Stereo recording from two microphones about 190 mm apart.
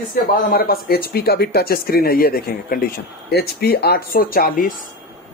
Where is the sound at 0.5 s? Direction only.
55° left (ahead or behind).